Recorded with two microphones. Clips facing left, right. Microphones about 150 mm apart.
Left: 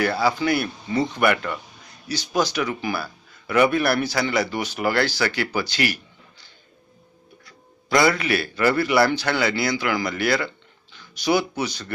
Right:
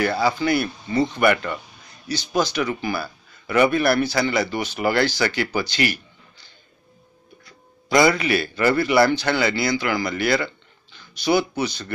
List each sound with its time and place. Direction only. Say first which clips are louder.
0.0 s a man's voice: right 1 dB; 5° left (ahead or behind)
7.9 s a man's voice: right 2 dB; centre (ahead or behind)